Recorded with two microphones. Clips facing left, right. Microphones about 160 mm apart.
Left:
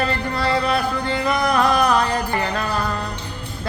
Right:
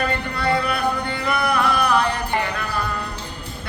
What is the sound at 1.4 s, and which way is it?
Music, 40° left (ahead or behind).